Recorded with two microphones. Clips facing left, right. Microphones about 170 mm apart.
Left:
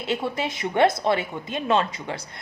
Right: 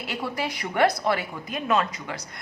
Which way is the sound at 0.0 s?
25° left (ahead or behind).